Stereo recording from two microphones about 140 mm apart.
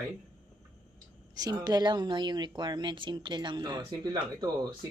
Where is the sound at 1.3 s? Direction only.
25° right (ahead or behind).